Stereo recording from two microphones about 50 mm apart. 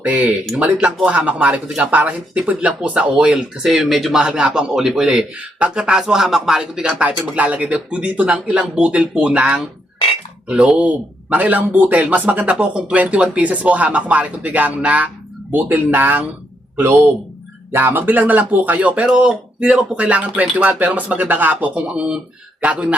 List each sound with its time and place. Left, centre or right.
0.0 s speech: right
3.2 s speech: centre
7.3 s speech: right
10.8 s speech: right
17.7 s speech: right
21.8 s speech: right